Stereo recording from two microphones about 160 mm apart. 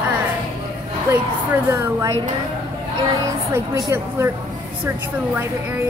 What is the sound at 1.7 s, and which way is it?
Speech, 15° right (ahead or behind).